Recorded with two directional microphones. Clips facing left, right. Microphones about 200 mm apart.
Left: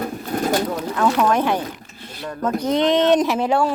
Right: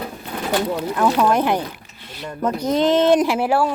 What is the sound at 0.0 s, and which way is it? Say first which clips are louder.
Pigeon: left 5 dB; 45° left (ahead or behind).